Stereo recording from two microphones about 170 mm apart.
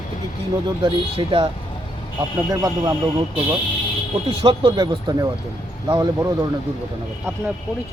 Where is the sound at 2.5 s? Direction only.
20° right (ahead or behind).